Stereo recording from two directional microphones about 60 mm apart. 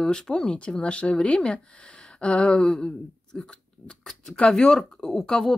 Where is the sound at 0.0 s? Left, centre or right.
Centre.